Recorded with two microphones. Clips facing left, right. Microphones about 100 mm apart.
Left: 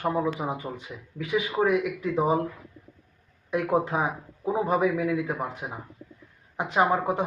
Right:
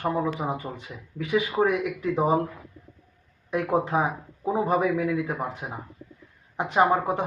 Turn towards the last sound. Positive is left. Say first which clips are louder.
# right 2 dB
turn(degrees=5)  # may be behind; listen again after turning